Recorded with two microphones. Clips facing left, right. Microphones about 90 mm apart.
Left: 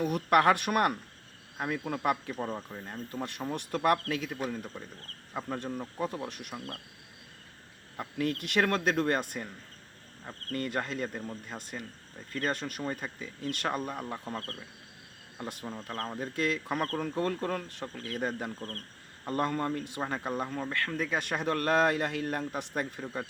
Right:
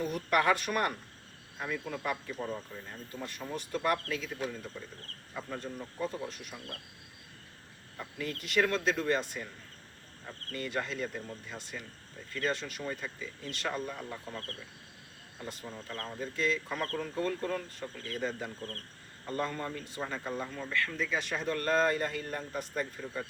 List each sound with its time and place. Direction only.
0.0 s speech: 60° left (ahead or behind)
1.5 s speech: 50° left (ahead or behind)
7.9 s speech: 60° left (ahead or behind)
10.5 s speech: 50° left (ahead or behind)
15.4 s speech: 60° left (ahead or behind)
15.7 s speech: 40° left (ahead or behind)
16.2 s speech: 60° left (ahead or behind)
20.0 s speech: 50° left (ahead or behind)